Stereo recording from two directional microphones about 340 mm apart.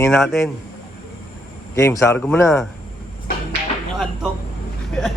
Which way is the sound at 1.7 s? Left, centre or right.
Centre.